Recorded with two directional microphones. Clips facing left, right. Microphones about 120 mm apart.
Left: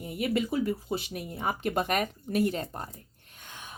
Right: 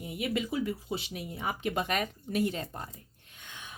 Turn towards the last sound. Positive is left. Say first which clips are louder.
# left 2 dB
turn(degrees=45)  # may be behind; listen again after turning